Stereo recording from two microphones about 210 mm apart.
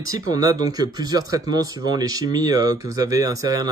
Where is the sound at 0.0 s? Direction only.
15° right (ahead or behind).